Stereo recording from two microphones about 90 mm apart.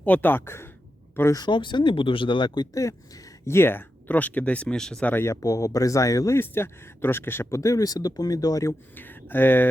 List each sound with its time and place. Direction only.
0.0 s speech: 20° left (ahead or behind)
1.5 s speech: 60° left (ahead or behind)
3.4 s speech: 25° left (ahead or behind); by 5.1 s 10° left (ahead or behind)
5.1 s speech: 30° left (ahead or behind)
9.0 s speech: 20° left (ahead or behind)